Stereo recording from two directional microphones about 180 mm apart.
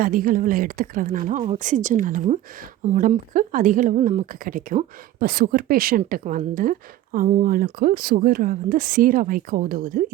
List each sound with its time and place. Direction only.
0.0 s speech: 50° right (ahead or behind)